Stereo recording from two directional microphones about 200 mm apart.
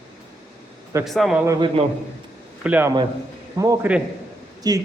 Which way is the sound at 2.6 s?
10° right (ahead or behind).